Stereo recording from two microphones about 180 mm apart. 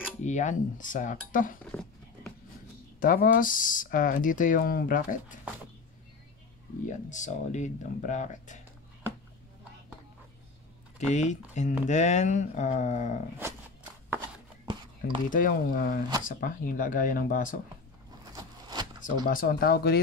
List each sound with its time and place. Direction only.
0.2 s speech: 40° left (ahead or behind)
1.6 s dog: 5° left (ahead or behind)
3.0 s speech: 50° left (ahead or behind)
6.9 s speech: 45° left (ahead or behind)
11.0 s speech: 40° left (ahead or behind)
14.7 s a sound: 25° right (ahead or behind)
15.2 s speech: 50° left (ahead or behind)
18.3 s a sound: 20° right (ahead or behind)
18.9 s speech: 50° left (ahead or behind)